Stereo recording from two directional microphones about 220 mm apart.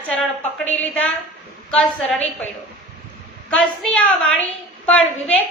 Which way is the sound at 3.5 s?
5° left (ahead or behind).